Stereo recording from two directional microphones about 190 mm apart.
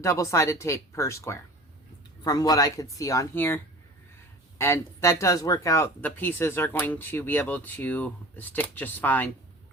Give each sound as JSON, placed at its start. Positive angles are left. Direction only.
{"t": 0.0, "sound": "speech", "side_deg": 15}